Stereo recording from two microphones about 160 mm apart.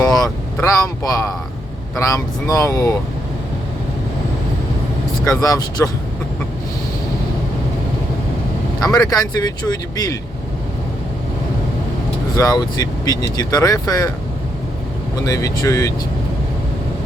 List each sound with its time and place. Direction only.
0.0 s vehicle: 20° left (ahead or behind)
0.6 s speech: 20° left (ahead or behind)
5.2 s speech: 20° left (ahead or behind)
9.0 s speech: 25° left (ahead or behind)
12.3 s speech: 25° left (ahead or behind)
15.1 s speech: 20° left (ahead or behind)